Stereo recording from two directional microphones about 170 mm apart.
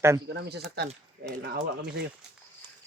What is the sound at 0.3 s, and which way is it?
Speech, 85° right.